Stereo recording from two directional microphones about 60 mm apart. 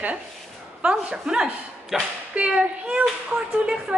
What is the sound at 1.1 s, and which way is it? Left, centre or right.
A woman's voice, centre.